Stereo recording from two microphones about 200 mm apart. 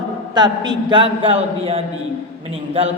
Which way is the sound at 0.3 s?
20° right (ahead or behind).